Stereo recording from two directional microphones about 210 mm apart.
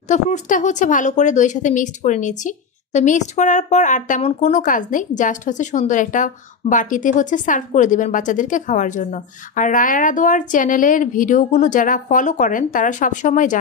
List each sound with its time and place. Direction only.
0.1 s speech: 35° left (ahead or behind)